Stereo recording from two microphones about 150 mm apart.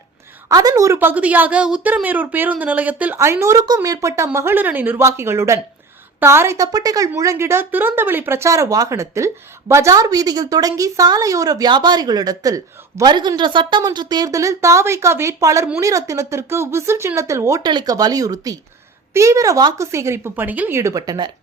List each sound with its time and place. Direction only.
0.4 s a woman's voice: 25° right (ahead or behind)